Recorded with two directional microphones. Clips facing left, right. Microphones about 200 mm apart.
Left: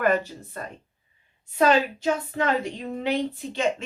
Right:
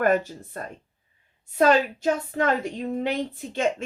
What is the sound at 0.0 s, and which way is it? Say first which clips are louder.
Speech: right 1 dB; 45° right (ahead or behind).